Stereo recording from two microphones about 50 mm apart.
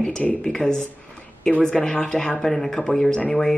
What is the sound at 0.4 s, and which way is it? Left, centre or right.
Speech, centre.